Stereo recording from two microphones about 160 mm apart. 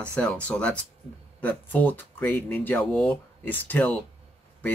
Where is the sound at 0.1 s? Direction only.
10° left (ahead or behind).